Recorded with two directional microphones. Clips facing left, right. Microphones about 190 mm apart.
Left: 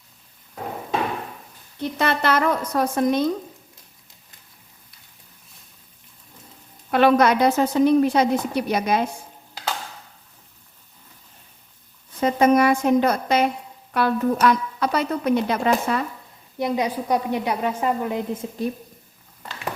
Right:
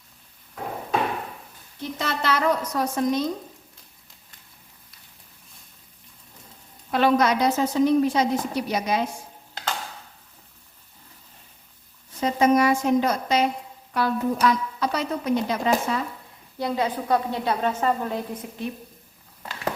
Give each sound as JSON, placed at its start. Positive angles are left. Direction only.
{"t": 1.8, "sound": "a woman's voice", "side_deg": 60}
{"t": 6.9, "sound": "a woman's voice", "side_deg": 60}
{"t": 12.2, "sound": "a woman's voice", "side_deg": 55}
{"t": 16.6, "sound": "a woman's voice", "side_deg": 20}